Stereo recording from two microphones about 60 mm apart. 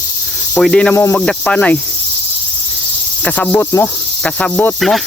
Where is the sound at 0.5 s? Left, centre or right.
Centre.